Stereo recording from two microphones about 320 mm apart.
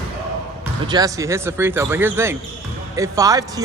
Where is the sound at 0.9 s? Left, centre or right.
Centre.